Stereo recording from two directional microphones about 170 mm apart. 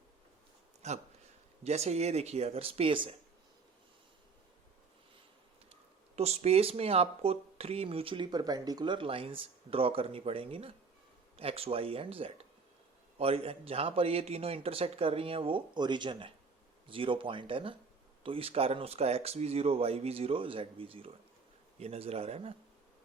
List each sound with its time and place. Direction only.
0.8 s speech: 40° right (ahead or behind)
6.1 s speech: 40° right (ahead or behind)